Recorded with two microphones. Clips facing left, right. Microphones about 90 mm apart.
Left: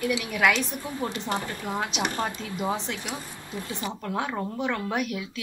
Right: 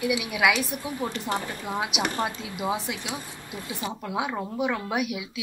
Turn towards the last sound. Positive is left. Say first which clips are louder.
# right 1 dB
turn(degrees=-10)  # may be behind; listen again after turning